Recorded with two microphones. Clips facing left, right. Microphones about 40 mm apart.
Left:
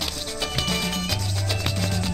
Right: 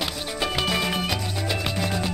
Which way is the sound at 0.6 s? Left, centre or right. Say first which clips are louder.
Right 2 dB; centre.